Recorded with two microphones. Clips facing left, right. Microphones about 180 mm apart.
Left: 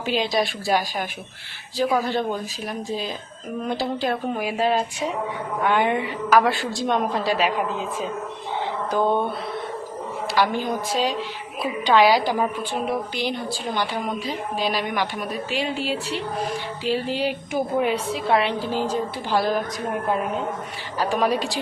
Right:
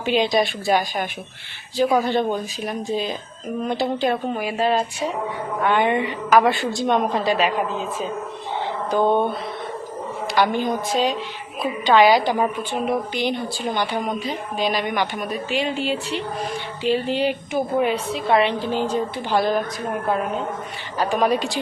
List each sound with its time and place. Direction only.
0.0 s a woman's voice: centre (ahead or behind)
4.4 s a woman's voice: 10° left (ahead or behind)
9.0 s mantra: 25° right (ahead or behind)
10.3 s a woman's voice: 5° left (ahead or behind)
14.6 s a woman's voice: 5° left (ahead or behind)
21.0 s a woman's voice: centre (ahead or behind)